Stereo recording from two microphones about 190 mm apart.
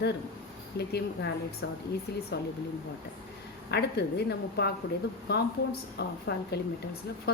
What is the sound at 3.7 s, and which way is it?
Speech, 60° left (ahead or behind).